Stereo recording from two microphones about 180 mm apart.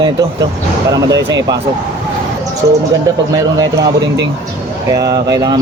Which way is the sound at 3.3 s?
20° right (ahead or behind).